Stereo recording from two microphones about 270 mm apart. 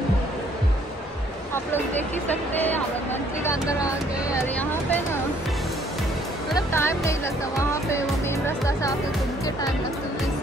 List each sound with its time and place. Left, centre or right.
2.2 s speech: centre
6.5 s speech: centre